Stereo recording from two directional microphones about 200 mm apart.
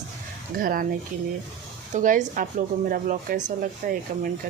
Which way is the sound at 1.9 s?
40° right (ahead or behind).